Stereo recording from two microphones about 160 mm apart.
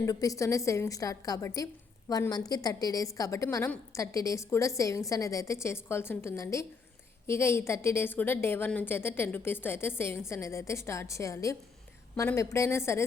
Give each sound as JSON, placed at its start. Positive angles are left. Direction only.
{"t": 0.0, "sound": "a woman's voice", "side_deg": 20}